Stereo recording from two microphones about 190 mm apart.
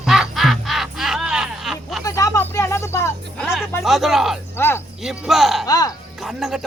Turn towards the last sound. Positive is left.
turn(degrees=0)  # may be behind; listen again after turning